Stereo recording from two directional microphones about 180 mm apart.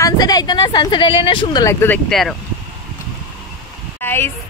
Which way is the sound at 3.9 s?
10° left (ahead or behind).